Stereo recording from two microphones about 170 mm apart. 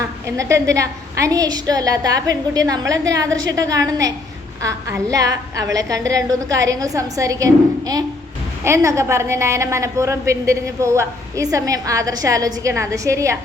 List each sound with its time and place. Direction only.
0.0 s a woman's voice: 15° right (ahead or behind)
5.1 s a woman's voice: 20° right (ahead or behind)